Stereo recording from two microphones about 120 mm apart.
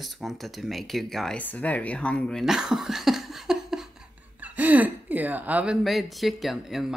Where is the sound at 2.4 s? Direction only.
5° right (ahead or behind).